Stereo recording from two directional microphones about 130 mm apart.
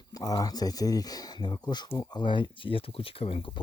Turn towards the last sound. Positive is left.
turn(degrees=45)  # may be behind; listen again after turning